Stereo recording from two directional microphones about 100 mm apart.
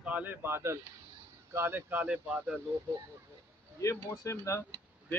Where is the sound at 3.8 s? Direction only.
30° left (ahead or behind).